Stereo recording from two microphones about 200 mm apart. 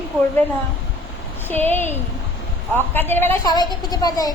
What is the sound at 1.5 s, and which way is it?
A woman's voice, 10° left (ahead or behind).